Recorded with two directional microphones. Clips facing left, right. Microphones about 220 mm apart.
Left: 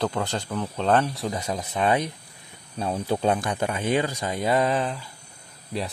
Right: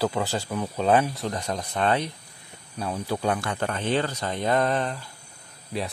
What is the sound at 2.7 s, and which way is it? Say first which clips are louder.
Speech: left 3 dB; 25° left (ahead or behind).